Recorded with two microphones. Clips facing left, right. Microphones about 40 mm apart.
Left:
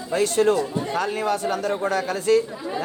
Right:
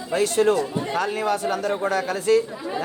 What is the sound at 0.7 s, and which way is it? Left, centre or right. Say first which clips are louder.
Speech: even; right.